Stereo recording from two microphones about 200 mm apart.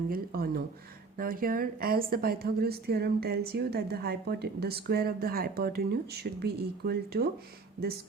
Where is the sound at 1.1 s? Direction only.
45° right (ahead or behind).